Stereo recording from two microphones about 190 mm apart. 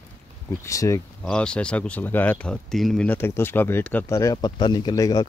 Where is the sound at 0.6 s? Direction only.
15° left (ahead or behind).